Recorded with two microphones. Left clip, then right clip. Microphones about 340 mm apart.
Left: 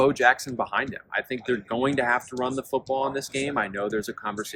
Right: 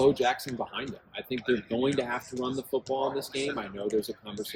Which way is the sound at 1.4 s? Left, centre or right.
Centre.